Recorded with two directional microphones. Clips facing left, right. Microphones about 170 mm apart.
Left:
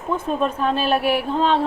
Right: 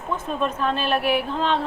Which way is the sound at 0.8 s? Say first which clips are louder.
Left 3 dB; centre (ahead or behind).